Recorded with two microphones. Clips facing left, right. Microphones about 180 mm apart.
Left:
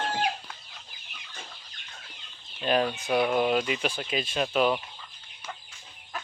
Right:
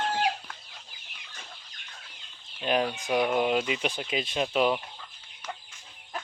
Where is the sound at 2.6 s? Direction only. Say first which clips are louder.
Left 1 dB; 15° right (ahead or behind).